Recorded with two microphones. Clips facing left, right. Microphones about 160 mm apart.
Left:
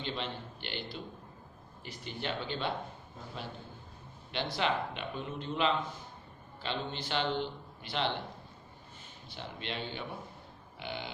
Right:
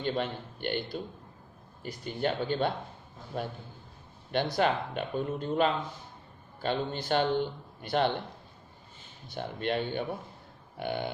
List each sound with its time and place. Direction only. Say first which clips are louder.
0.0 s speech: right 7 dB; 50° right (ahead or behind)
4.5 s speech: right 3 dB; 45° right (ahead or behind)
9.3 s speech: right 9 dB; 50° right (ahead or behind)